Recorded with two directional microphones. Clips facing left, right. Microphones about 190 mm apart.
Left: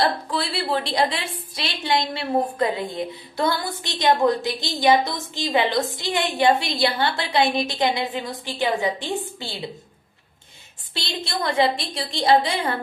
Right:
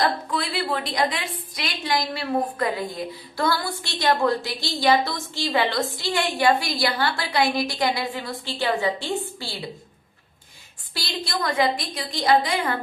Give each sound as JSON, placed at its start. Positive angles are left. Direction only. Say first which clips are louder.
{"t": 0.0, "sound": "a woman's voice", "louder": "left 1 dB", "side_deg": 30}
{"t": 10.9, "sound": "a woman's voice", "louder": "even", "side_deg": 25}